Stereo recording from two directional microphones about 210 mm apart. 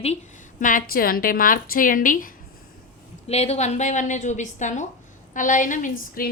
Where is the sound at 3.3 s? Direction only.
30° left (ahead or behind).